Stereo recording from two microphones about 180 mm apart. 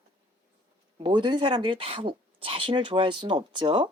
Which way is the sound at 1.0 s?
25° right (ahead or behind).